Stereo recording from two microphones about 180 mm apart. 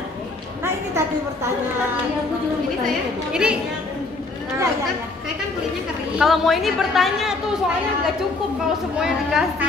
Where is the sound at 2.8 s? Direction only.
5° right (ahead or behind).